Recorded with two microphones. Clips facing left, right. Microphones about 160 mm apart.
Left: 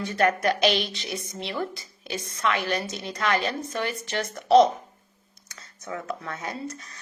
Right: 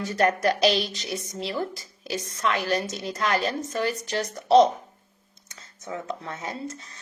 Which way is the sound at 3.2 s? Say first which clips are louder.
Even; 40° right (ahead or behind).